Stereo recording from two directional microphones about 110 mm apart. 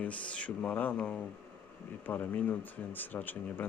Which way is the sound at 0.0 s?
10° left (ahead or behind).